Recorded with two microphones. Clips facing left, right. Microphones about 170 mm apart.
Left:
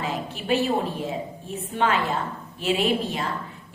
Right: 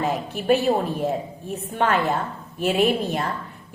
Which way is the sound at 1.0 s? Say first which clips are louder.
Right 5 dB; 50° right (ahead or behind).